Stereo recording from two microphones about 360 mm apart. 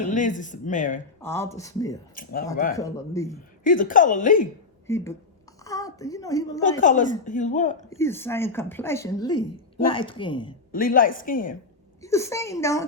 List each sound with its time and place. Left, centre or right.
0.0 s a woman's voice: left
1.2 s speech: centre
2.2 s a woman's voice: left
2.7 s speech: centre
3.6 s a woman's voice: left
4.9 s a woman's voice: centre
6.7 s a woman's voice: left
7.9 s a woman's voice: centre; by 11.5 s left
12.0 s speech: centre